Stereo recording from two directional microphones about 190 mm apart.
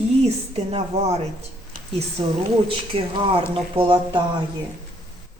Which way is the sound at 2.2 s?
25° right (ahead or behind).